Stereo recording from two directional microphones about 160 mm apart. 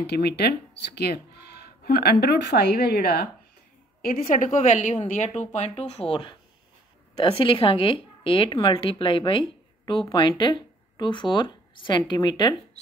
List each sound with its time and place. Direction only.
0.0 s a woman's voice: 90° left
4.0 s speech: 65° left (ahead or behind); by 12.5 s 25° left (ahead or behind)